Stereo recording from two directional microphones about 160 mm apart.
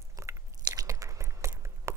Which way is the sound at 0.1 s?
20° right (ahead or behind).